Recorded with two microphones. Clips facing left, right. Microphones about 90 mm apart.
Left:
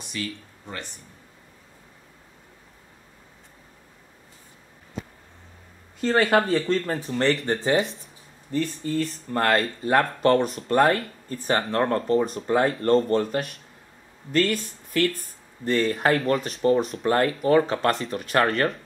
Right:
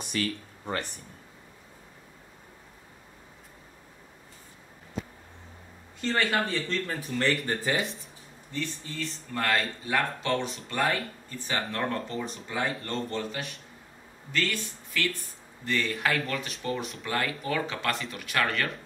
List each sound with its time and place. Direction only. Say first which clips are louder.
0.0 s speech: right 2 dB; 50° right (ahead or behind)
5.9 s speech: left 7 dB; 45° left (ahead or behind); by 7.8 s 30° left (ahead or behind)
8.5 s speech: left 9 dB; 45° left (ahead or behind)